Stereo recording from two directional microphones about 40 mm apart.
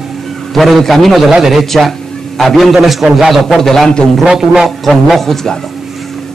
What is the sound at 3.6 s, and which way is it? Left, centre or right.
Speech, centre.